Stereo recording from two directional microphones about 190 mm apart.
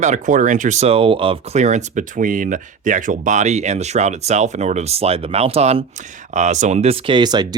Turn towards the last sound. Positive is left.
turn(degrees=-20)  # may be behind; listen again after turning